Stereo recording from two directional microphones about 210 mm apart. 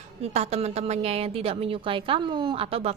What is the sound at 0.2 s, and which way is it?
A woman's voice, 30° right (ahead or behind).